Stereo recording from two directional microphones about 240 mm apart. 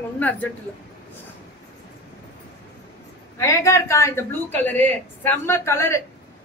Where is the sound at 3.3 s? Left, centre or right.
Centre.